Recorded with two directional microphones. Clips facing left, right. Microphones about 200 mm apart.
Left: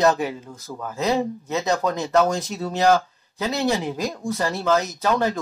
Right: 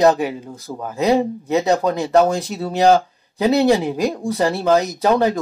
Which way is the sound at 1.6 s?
30° right (ahead or behind).